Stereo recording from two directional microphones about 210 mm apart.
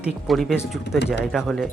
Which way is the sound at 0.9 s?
55° left (ahead or behind).